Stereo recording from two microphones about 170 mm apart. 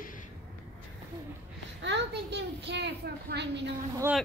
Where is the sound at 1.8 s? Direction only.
90° right.